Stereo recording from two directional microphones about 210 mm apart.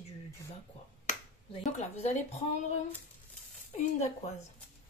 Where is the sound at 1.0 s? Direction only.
35° left (ahead or behind).